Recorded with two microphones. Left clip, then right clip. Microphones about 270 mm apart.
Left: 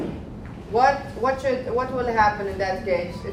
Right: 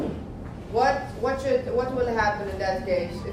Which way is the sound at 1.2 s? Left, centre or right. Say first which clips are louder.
Left 4 dB; left.